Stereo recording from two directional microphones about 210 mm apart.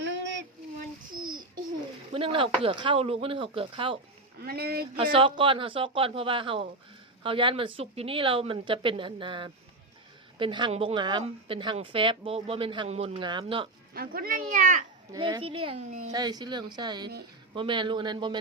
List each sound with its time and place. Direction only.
0.8 s a sound: 40° right (ahead or behind)
2.1 s a woman's voice: 25° right (ahead or behind)
4.4 s speech: 45° right (ahead or behind)
5.1 s a woman's voice: 25° right (ahead or behind)
13.9 s speech: 45° right (ahead or behind)
15.1 s a woman's voice: 20° right (ahead or behind); by 16.1 s 35° right (ahead or behind)
16.1 s a woman's voice: 20° right (ahead or behind)